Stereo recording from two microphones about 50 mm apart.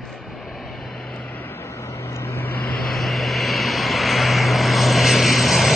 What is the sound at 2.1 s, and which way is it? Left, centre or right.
Vehicle, left.